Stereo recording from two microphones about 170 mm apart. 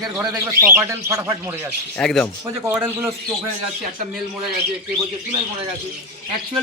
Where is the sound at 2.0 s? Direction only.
Centre (ahead or behind).